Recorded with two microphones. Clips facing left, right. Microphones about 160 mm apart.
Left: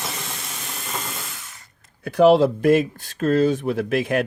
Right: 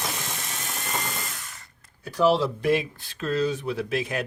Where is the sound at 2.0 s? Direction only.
60° left (ahead or behind).